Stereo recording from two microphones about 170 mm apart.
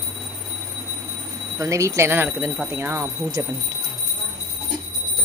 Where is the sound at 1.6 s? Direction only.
20° right (ahead or behind).